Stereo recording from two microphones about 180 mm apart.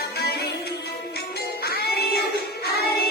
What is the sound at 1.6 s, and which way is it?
Music, 60° left (ahead or behind).